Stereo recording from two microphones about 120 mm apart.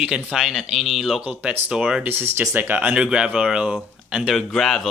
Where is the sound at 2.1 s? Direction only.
20° right (ahead or behind); by 4.8 s centre (ahead or behind).